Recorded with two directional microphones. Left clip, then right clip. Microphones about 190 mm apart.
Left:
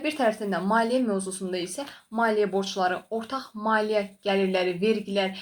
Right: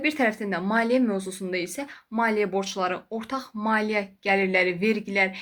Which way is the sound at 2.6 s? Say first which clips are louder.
Left 1 dB; 20° right (ahead or behind).